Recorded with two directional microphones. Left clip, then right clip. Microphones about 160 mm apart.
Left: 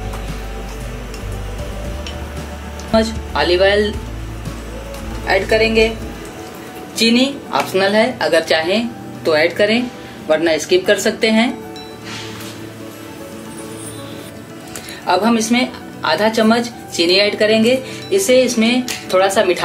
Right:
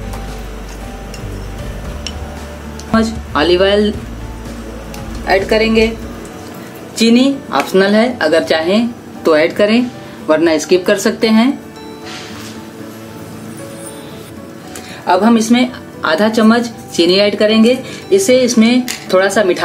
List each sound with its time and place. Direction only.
2.9 s speech: 65° right (ahead or behind)
5.2 s a woman's voice: 50° right (ahead or behind)
7.0 s a woman's voice: 50° right (ahead or behind)
15.0 s speech: 60° right (ahead or behind)
18.2 s a woman's voice: 55° right (ahead or behind)